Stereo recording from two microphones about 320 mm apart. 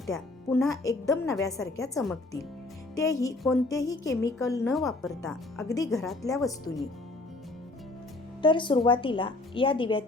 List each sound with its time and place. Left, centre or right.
0.0 s a woman's voice: centre
8.4 s a woman's voice: centre